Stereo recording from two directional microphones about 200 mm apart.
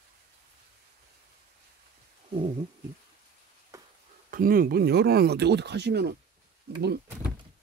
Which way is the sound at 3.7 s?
15° right (ahead or behind).